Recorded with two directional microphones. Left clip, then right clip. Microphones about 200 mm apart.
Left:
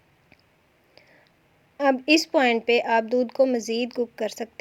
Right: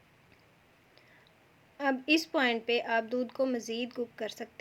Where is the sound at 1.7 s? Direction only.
35° left (ahead or behind).